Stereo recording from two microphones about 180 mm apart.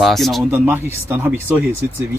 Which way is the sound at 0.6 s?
10° right (ahead or behind).